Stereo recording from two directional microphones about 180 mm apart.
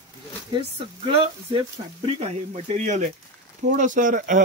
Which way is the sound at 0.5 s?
30° right (ahead or behind).